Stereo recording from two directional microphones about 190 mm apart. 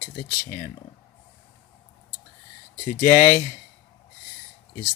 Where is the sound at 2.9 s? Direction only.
15° left (ahead or behind).